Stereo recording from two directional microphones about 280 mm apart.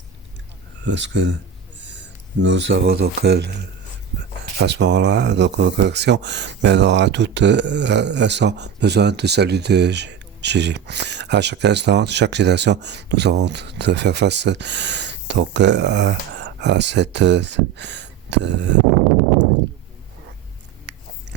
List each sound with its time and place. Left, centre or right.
0.9 s speech: right
20.9 s biting: right